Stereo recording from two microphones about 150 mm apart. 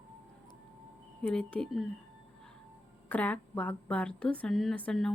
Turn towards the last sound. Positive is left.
turn(degrees=5)  # may be behind; listen again after turning